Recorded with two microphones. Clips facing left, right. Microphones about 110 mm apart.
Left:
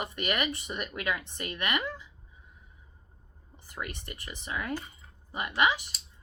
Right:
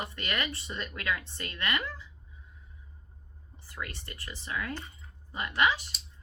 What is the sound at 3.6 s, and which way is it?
Speech, 20° left (ahead or behind).